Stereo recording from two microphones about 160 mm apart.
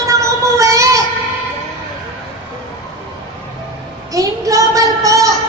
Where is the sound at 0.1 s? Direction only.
20° right (ahead or behind).